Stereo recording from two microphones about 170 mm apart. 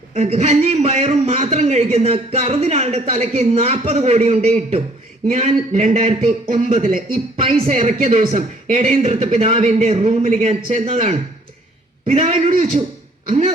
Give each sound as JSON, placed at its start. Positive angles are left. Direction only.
{"t": 0.1, "sound": "a man's voice", "side_deg": -40}